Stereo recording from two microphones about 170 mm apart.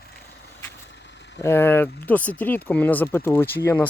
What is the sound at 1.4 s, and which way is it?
Speech, 15° left (ahead or behind).